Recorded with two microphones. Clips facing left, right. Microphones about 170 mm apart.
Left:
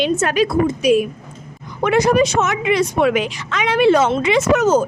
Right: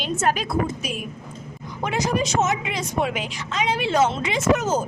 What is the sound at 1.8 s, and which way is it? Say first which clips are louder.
A woman's voice: left 9 dB; 65° left (ahead or behind).